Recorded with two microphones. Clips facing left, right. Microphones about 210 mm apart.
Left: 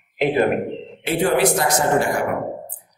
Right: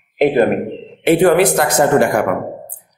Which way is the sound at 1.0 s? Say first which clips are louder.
Right 7 dB; 60° right (ahead or behind).